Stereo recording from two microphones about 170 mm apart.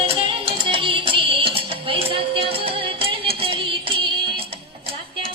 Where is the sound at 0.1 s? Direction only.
30° right (ahead or behind).